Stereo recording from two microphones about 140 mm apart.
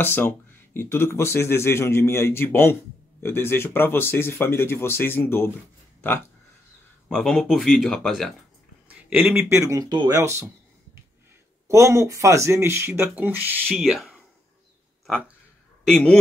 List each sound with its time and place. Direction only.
0.0 s a man's voice: 15° left (ahead or behind)
5.9 s a sound: 15° left (ahead or behind)
7.1 s speech: 5° left (ahead or behind)
8.8 s speech: 10° right (ahead or behind)
11.6 s speech: 20° right (ahead or behind)
13.7 s speech: centre (ahead or behind)
15.8 s speech: 5° left (ahead or behind)